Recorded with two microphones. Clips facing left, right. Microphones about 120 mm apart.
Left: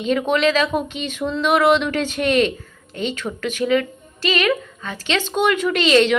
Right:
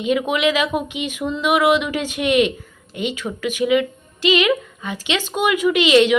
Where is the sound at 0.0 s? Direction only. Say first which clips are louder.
Left 1 dB; 10° right (ahead or behind).